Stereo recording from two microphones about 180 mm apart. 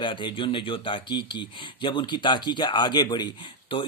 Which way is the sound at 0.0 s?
25° left (ahead or behind).